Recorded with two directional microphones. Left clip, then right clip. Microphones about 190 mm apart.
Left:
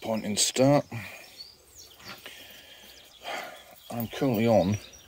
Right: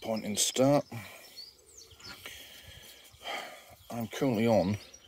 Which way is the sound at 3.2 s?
20° right (ahead or behind).